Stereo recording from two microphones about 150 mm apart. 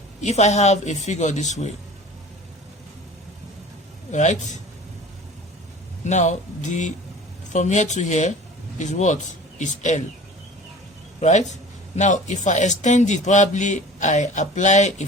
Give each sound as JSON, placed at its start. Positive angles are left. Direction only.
{"t": 0.2, "sound": "speech", "side_deg": 50}
{"t": 4.1, "sound": "speech", "side_deg": 50}
{"t": 6.1, "sound": "speech", "side_deg": 55}
{"t": 11.2, "sound": "speech", "side_deg": 50}